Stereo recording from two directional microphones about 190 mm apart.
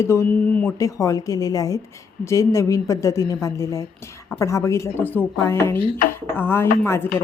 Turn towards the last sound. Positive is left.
turn(degrees=10)  # may be behind; listen again after turning